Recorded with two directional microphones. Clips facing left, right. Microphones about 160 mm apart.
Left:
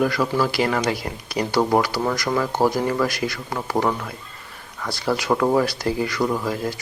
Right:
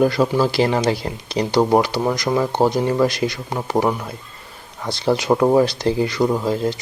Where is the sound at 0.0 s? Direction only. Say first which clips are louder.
Right 4 dB; 25° right (ahead or behind).